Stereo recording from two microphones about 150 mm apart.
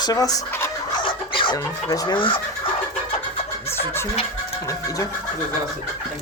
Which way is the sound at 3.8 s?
15° left (ahead or behind).